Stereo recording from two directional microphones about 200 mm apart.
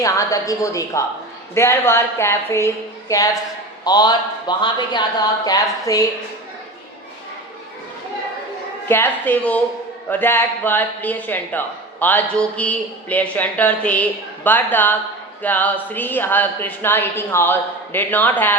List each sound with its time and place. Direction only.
0.0 s a man's voice: 15° left (ahead or behind)
8.9 s a man's voice: 10° left (ahead or behind)